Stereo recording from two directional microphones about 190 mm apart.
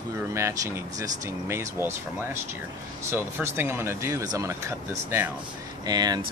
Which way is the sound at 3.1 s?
10° right (ahead or behind).